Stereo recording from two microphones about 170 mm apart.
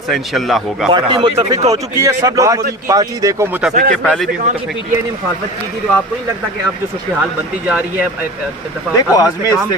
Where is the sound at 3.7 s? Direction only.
50° right (ahead or behind).